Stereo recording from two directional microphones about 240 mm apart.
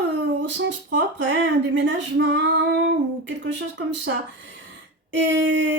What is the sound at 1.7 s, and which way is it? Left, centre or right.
Female singing, right.